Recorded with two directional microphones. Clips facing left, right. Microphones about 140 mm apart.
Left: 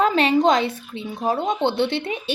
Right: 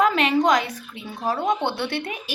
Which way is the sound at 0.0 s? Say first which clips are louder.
Left 2 dB; 30° left (ahead or behind).